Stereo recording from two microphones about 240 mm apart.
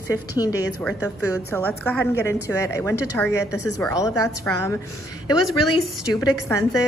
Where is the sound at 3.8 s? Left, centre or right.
Centre.